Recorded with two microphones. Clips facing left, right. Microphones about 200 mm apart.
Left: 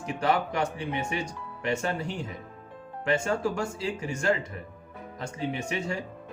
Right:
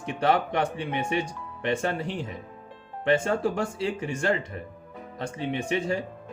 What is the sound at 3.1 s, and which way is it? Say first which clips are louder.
Speech: right 3 dB; 30° right (ahead or behind).